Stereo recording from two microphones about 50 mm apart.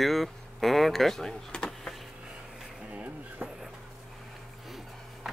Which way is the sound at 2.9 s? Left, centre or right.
Right.